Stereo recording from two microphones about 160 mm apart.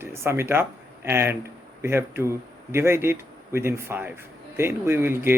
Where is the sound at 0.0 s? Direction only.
15° right (ahead or behind).